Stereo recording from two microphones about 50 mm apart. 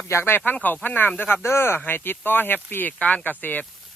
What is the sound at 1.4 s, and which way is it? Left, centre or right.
Speech, left.